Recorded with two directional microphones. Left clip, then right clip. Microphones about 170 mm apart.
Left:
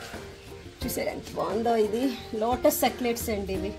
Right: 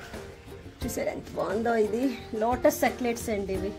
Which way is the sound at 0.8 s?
15° left (ahead or behind).